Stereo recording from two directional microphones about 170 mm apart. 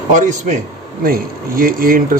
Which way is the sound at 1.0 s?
60° right (ahead or behind).